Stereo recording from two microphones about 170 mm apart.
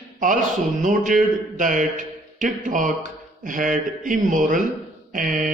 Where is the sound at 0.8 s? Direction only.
50° right (ahead or behind).